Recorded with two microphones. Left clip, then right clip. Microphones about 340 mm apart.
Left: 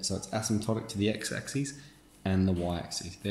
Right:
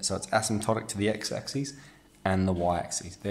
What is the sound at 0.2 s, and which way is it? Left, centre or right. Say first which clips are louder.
Speech: right 6 dB; right.